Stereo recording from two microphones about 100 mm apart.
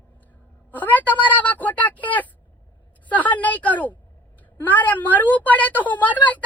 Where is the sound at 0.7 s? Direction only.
15° left (ahead or behind).